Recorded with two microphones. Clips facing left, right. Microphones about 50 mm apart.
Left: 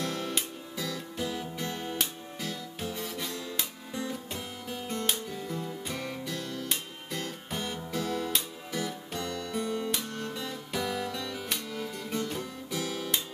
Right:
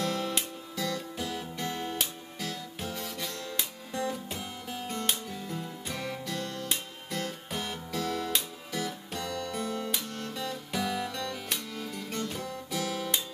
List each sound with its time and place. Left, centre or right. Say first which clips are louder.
0.0 s music: right 2 dB; centre
12.7 s guitar: even; centre